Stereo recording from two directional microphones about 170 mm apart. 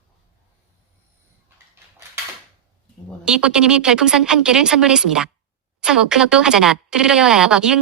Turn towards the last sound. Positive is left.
turn(degrees=-5)  # may be behind; listen again after turning